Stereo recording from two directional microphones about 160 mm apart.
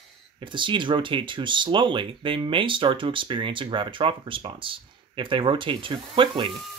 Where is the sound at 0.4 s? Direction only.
30° right (ahead or behind).